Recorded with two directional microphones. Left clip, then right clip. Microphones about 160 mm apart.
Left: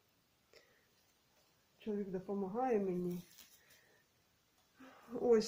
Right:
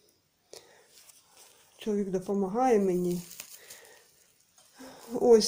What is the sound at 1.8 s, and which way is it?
Speech, 45° right (ahead or behind).